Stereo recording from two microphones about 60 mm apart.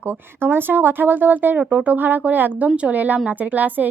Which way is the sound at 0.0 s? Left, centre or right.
Right.